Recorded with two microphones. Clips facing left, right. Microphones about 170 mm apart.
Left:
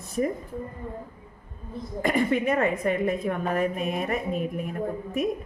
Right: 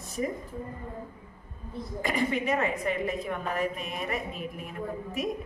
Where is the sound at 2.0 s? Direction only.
50° left (ahead or behind).